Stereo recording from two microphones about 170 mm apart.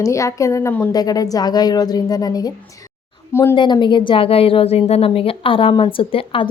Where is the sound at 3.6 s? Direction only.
25° left (ahead or behind).